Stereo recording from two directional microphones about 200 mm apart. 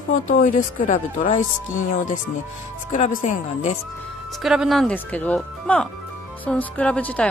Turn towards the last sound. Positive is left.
turn(degrees=5)  # may be behind; listen again after turning